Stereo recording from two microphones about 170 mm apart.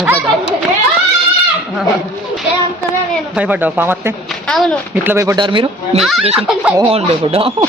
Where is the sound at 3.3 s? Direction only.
10° right (ahead or behind).